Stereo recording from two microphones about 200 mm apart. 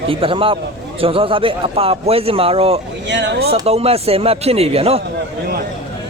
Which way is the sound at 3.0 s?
60° right (ahead or behind).